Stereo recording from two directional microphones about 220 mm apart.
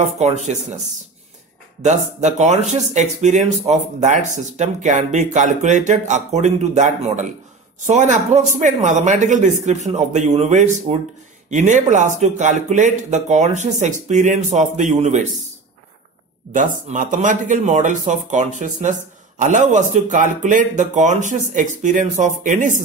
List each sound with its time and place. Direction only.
0.0 s speech: 30° right (ahead or behind)
1.8 s speech: 30° right (ahead or behind)
16.5 s speech: 35° right (ahead or behind)